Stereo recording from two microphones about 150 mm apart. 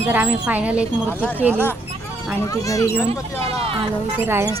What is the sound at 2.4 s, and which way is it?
Speech, 20° left (ahead or behind).